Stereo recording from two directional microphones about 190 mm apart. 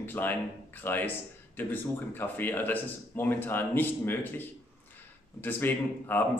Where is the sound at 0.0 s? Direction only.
10° left (ahead or behind).